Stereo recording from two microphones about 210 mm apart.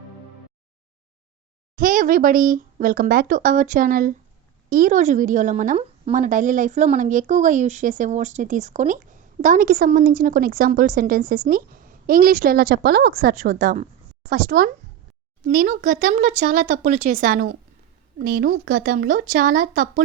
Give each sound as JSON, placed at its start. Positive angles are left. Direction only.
{"t": 1.7, "sound": "a woman's voice", "side_deg": -40}